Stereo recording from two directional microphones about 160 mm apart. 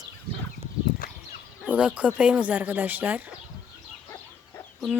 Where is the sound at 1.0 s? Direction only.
60° left (ahead or behind).